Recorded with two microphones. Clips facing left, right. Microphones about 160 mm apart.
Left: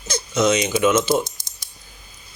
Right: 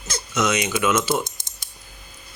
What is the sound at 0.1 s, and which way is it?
Speech, 25° left (ahead or behind).